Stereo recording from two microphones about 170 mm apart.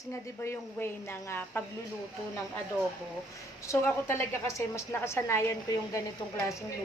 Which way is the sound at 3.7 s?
15° left (ahead or behind).